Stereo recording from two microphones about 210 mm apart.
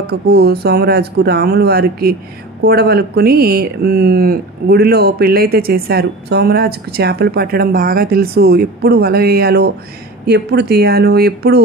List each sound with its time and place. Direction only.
0.0 s speech: 50° right (ahead or behind)